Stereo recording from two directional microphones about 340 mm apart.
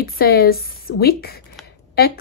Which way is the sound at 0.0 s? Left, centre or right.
Left.